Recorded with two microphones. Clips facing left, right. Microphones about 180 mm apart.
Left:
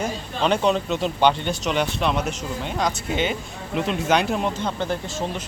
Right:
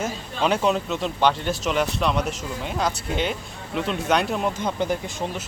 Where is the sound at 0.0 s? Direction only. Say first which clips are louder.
Left 1 dB; 5° right (ahead or behind).